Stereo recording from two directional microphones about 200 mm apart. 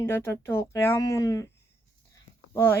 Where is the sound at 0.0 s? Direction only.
10° left (ahead or behind).